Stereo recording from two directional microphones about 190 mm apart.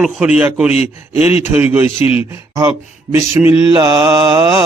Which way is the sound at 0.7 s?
35° left (ahead or behind).